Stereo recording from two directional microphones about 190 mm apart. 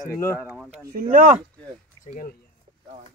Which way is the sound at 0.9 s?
45° right (ahead or behind).